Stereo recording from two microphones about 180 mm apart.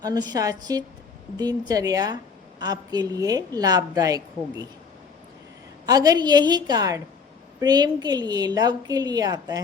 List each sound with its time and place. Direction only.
0.0 s a woman's voice: 20° right (ahead or behind)
5.8 s a woman's voice: 20° right (ahead or behind)